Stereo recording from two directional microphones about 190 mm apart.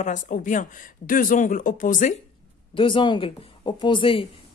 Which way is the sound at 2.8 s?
25° left (ahead or behind).